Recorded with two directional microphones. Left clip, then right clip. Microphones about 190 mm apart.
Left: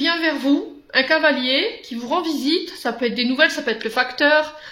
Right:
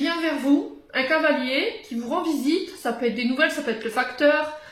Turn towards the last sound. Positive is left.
turn(degrees=30)  # may be behind; listen again after turning